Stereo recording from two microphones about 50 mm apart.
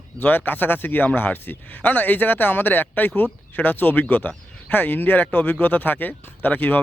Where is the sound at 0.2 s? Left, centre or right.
Left.